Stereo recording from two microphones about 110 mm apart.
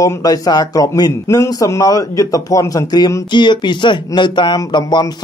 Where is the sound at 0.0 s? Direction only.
35° left (ahead or behind).